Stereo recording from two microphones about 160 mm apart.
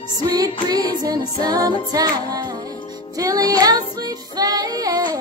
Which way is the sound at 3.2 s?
20° right (ahead or behind).